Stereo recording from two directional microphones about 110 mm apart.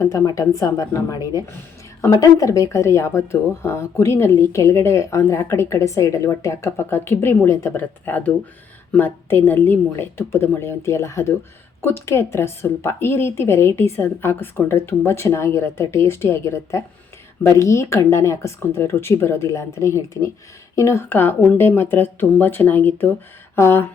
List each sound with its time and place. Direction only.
0.0 s a woman's voice: 30° left (ahead or behind)
2.2 s speech: 30° left (ahead or behind)
8.0 s speech: 15° left (ahead or behind)